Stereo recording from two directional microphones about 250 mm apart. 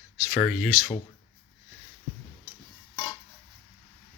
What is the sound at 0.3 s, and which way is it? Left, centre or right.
Speech, centre.